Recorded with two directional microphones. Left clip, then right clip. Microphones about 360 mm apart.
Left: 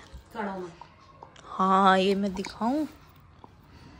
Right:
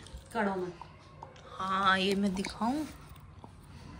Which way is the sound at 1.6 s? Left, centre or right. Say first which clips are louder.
Left 7 dB; centre.